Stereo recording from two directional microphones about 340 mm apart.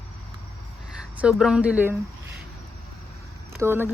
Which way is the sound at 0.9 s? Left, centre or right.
Centre.